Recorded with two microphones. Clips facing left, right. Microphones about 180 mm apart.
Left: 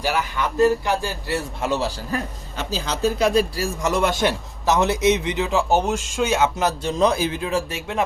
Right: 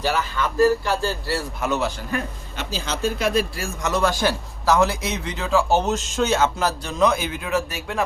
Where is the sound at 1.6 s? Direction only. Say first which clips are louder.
Right 1 dB; 30° left (ahead or behind).